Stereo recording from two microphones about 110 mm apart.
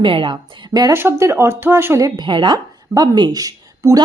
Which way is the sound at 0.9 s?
20° right (ahead or behind).